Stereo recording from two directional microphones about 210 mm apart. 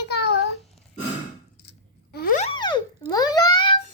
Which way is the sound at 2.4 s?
20° left (ahead or behind).